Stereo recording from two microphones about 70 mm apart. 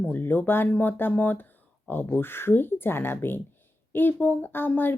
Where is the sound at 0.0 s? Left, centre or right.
Left.